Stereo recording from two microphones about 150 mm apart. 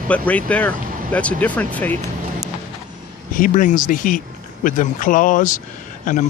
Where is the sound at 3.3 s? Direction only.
60° left (ahead or behind).